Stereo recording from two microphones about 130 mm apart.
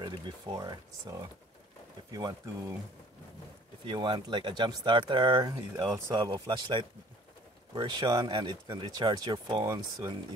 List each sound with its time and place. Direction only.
0.0 s speech: 30° right (ahead or behind)
3.8 s speech: 40° right (ahead or behind)